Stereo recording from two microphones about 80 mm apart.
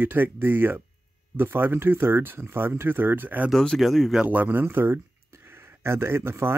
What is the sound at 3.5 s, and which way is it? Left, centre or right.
Speech, centre.